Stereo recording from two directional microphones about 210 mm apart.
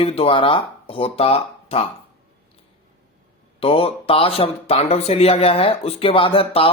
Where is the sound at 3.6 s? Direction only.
25° left (ahead or behind).